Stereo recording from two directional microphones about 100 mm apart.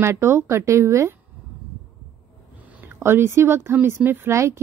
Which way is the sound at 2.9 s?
25° right (ahead or behind).